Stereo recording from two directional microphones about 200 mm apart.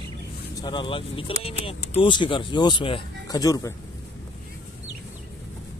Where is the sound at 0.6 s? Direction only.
20° left (ahead or behind).